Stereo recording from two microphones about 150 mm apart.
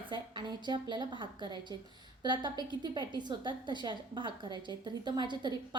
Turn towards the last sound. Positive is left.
turn(degrees=-30)  # may be behind; listen again after turning